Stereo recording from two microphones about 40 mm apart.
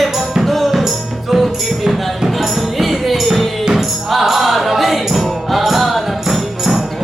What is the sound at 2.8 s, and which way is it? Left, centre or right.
Music, centre.